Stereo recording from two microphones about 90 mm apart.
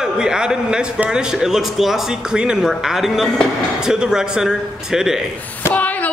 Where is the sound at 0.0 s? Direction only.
10° right (ahead or behind).